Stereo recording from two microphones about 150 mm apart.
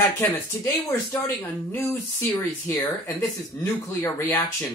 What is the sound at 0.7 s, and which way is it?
Speech, 25° left (ahead or behind).